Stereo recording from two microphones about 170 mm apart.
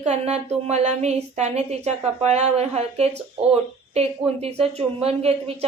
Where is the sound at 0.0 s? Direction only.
40° right (ahead or behind).